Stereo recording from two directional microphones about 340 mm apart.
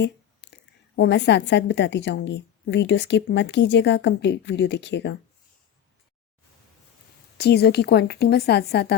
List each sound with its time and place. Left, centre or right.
0.0 s a woman's voice: left
7.3 s speech: left